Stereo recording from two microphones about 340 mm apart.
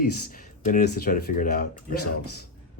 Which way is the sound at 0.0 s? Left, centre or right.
Left.